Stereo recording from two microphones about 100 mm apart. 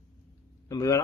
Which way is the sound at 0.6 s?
35° left (ahead or behind).